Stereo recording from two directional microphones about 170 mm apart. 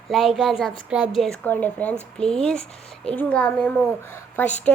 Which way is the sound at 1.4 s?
10° left (ahead or behind).